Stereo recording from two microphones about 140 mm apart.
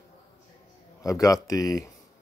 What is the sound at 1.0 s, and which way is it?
Speech, 25° left (ahead or behind).